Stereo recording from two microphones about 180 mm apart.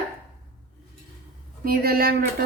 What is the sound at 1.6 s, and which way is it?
Speech, 55° right (ahead or behind).